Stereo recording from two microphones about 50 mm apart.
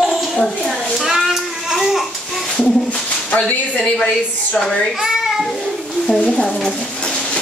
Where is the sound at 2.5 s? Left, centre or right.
Left.